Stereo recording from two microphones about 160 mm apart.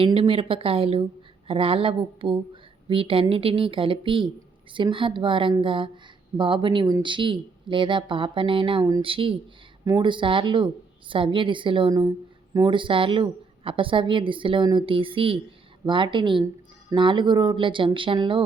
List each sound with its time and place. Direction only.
0.0 s a woman's voice: 35° right (ahead or behind)